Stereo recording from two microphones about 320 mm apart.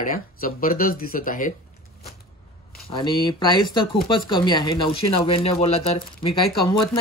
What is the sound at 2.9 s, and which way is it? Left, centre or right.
Speech, centre.